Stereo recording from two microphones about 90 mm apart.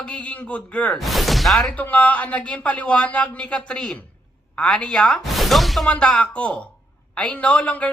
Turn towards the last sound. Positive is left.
turn(degrees=15)  # may be behind; listen again after turning